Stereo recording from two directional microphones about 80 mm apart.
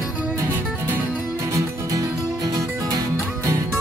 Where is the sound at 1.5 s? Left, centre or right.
Right.